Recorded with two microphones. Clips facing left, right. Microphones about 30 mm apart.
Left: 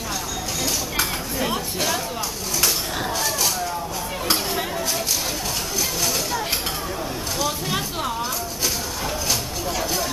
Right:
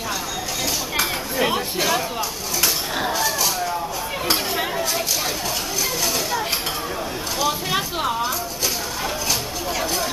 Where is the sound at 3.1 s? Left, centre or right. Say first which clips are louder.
Right 2 dB; centre.